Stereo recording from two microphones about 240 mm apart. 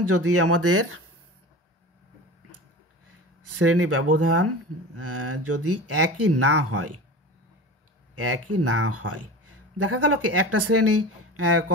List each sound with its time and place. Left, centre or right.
0.0 s speech: right
3.5 s speech: right
8.1 s speech: right